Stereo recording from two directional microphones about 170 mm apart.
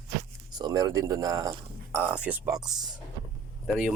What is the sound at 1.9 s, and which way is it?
Speech, 10° right (ahead or behind).